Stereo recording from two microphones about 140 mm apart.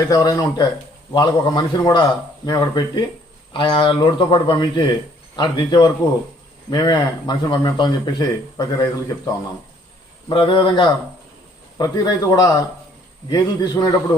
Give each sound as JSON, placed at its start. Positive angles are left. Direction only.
{"t": 0.0, "sound": "a man's voice", "side_deg": 25}
{"t": 10.2, "sound": "a man's voice", "side_deg": 35}